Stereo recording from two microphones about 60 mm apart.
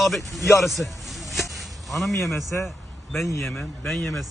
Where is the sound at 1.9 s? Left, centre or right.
Centre.